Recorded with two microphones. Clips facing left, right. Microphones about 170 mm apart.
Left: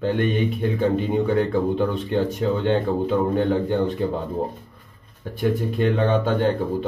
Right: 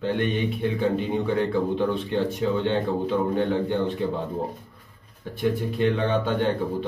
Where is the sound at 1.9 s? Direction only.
45° left (ahead or behind).